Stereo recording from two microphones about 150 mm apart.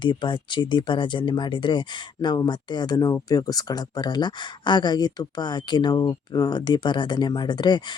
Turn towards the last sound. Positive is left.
turn(degrees=30)  # may be behind; listen again after turning